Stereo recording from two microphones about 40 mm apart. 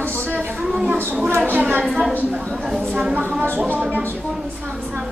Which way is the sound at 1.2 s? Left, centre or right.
Right.